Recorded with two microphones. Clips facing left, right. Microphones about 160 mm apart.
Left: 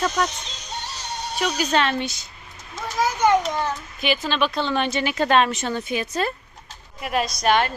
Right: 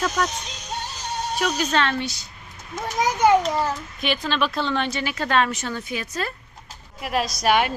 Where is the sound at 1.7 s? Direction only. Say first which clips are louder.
Left 1 dB; 20° left (ahead or behind).